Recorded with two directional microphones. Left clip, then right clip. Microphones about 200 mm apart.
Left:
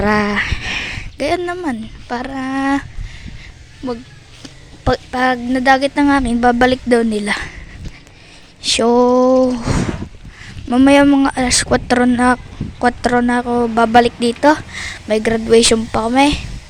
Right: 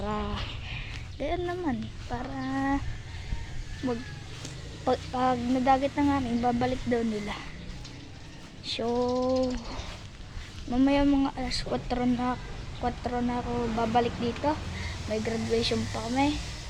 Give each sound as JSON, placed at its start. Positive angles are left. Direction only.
{"t": 0.0, "sound": "speech", "side_deg": 40}
{"t": 4.9, "sound": "speech", "side_deg": 40}
{"t": 8.6, "sound": "speech", "side_deg": 40}